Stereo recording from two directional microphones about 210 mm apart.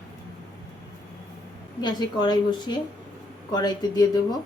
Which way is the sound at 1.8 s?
20° left (ahead or behind).